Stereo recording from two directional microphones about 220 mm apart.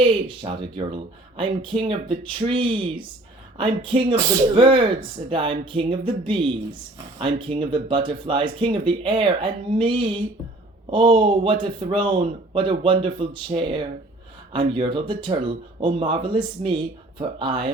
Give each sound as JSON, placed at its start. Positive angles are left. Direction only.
{"t": 0.3, "sound": "speech", "side_deg": -20}